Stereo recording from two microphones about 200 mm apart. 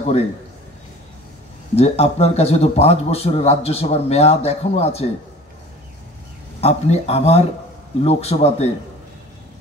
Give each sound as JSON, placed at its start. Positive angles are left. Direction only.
{"t": 0.0, "sound": "a man's voice", "side_deg": 30}
{"t": 1.8, "sound": "a man's voice", "side_deg": 30}
{"t": 6.6, "sound": "a man's voice", "side_deg": 30}